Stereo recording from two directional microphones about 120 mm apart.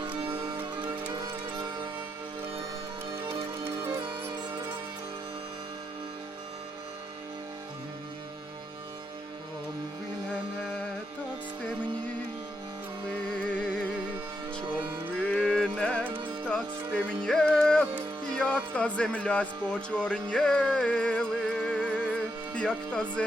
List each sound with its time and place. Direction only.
0.3 s music: 40° right (ahead or behind)
3.6 s music: 20° right (ahead or behind)
15.3 s music: 10° left (ahead or behind)
22.9 s speech: 10° left (ahead or behind)